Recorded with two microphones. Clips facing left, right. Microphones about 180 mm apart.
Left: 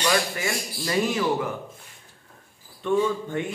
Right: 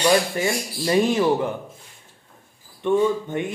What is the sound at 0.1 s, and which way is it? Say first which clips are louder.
Speech: right 5 dB; 25° right (ahead or behind).